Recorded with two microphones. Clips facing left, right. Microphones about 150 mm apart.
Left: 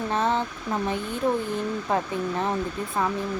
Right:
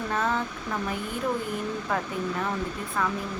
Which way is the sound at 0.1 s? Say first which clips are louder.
Left 3 dB; 25° left (ahead or behind).